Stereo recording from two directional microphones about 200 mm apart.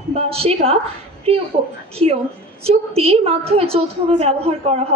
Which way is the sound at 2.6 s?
30° right (ahead or behind).